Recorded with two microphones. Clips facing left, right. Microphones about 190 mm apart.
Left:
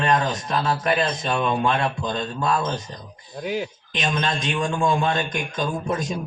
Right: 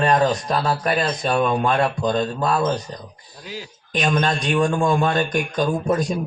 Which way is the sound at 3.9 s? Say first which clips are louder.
Right 5 dB; 45° right (ahead or behind).